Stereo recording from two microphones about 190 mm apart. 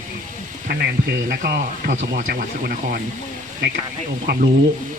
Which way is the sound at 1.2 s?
50° right (ahead or behind).